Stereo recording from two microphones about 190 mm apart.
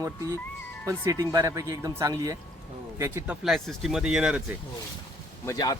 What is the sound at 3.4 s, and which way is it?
Speech, centre (ahead or behind).